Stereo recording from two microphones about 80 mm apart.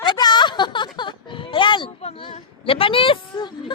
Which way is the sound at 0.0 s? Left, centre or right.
Left.